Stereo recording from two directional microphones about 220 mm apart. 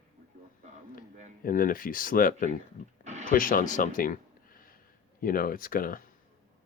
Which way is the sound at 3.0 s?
35° right (ahead or behind).